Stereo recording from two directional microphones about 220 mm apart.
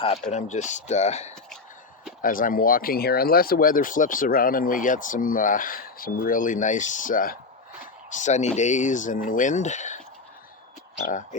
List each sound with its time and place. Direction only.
0.0 s speech: 30° left (ahead or behind)
11.0 s speech: 35° left (ahead or behind)